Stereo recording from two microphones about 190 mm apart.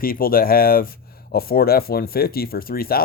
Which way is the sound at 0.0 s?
50° left (ahead or behind).